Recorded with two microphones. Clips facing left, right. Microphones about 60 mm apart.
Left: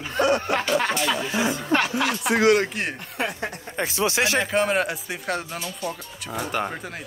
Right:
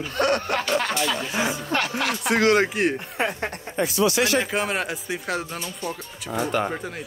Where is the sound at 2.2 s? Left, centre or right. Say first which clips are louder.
Left 1 dB; right.